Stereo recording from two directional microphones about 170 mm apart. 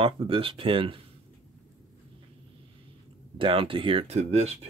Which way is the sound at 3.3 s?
30° right (ahead or behind).